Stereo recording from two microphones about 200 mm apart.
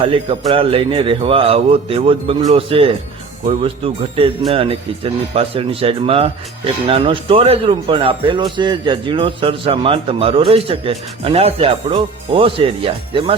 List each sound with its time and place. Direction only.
0.0 s speech: 25° right (ahead or behind)